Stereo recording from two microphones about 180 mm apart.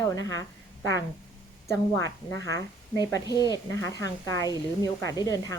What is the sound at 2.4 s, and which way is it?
Speech, 20° left (ahead or behind).